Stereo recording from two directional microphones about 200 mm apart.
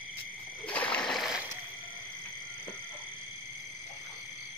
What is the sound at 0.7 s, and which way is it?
Splash, 5° left (ahead or behind).